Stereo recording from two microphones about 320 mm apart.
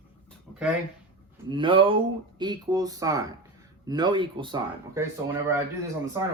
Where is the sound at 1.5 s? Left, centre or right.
Centre.